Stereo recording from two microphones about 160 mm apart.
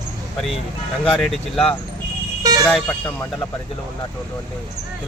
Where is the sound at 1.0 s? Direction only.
5° left (ahead or behind).